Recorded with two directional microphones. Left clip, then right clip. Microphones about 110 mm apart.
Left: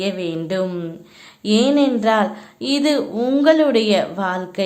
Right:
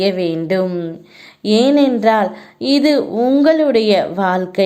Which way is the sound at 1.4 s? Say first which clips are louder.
Right 4 dB; 35° right (ahead or behind).